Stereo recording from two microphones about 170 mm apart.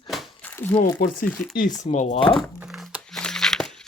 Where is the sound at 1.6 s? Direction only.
45° left (ahead or behind).